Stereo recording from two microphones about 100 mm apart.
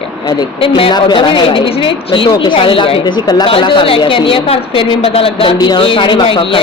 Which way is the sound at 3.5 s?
60° left (ahead or behind).